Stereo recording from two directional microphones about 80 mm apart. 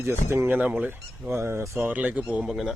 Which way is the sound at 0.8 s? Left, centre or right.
Right.